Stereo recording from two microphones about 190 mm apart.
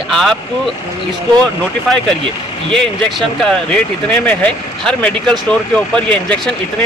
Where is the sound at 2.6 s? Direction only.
5° left (ahead or behind).